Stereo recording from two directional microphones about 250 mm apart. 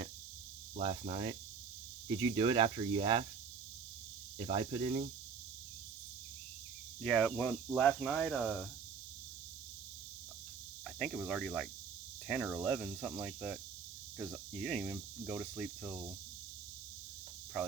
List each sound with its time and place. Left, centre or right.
0.8 s speech: right
4.4 s speech: right
7.0 s speech: centre
10.8 s speech: centre